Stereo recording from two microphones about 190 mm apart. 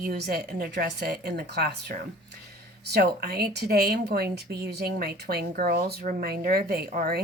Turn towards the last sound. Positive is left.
turn(degrees=-50)  # may be behind; listen again after turning